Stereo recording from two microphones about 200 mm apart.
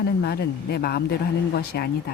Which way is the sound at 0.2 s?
50° left (ahead or behind).